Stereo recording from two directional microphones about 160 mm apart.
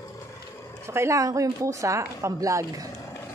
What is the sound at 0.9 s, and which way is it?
Speech, 15° right (ahead or behind).